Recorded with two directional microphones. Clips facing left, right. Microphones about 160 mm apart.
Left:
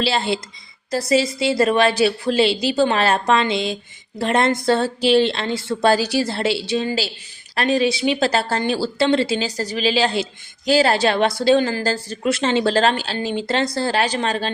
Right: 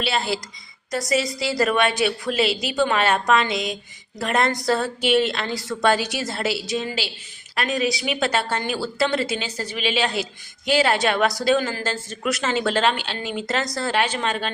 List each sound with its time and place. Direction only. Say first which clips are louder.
0.0 s a woman's voice: left 4 dB; 25° left (ahead or behind)